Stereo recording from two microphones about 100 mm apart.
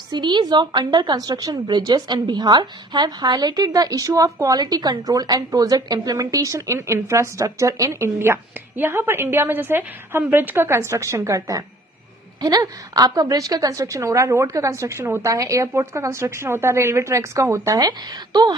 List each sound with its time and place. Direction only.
0.1 s a woman's voice: 50° right (ahead or behind)